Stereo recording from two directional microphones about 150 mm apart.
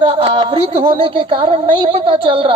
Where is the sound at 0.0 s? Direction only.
35° right (ahead or behind).